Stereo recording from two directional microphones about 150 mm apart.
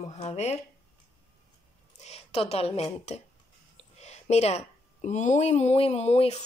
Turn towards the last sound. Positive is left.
turn(degrees=45)  # may be behind; listen again after turning